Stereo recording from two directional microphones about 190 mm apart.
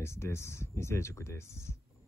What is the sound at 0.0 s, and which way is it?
Speech, 15° left (ahead or behind).